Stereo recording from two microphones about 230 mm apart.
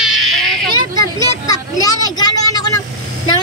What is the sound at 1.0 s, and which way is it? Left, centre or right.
Vehicle, centre.